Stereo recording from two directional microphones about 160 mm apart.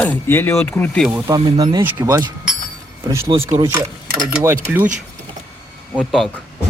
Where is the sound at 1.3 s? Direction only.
25° right (ahead or behind).